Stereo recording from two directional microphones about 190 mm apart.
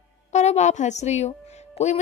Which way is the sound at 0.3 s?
35° left (ahead or behind).